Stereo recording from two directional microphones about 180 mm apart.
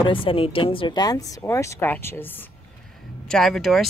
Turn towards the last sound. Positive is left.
turn(degrees=0)  # may be behind; listen again after turning